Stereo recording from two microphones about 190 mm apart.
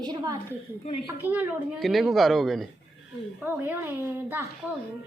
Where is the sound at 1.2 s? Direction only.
10° right (ahead or behind).